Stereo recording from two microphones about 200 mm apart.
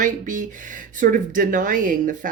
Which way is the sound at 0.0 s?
40° right (ahead or behind).